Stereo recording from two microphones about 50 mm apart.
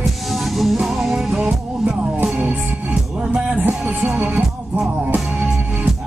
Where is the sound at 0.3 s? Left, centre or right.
Centre.